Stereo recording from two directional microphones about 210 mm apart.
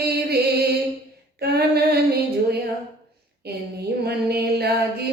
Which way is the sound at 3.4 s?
50° right (ahead or behind).